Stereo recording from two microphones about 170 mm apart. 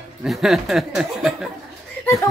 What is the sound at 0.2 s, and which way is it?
Speech, centre (ahead or behind).